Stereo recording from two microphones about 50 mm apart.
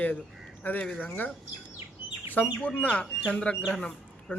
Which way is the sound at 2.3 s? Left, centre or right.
Left.